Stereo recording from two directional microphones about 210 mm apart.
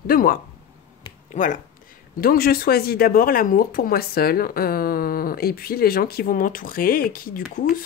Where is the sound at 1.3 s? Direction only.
35° left (ahead or behind).